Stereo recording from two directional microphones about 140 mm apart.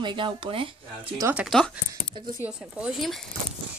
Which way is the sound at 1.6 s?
5° left (ahead or behind).